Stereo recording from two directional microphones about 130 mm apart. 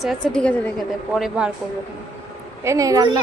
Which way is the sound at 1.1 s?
5° right (ahead or behind).